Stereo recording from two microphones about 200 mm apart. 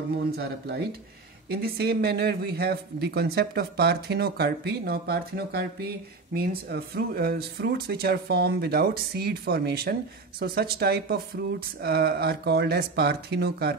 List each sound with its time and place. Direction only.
0.2 s speech: 50° right (ahead or behind)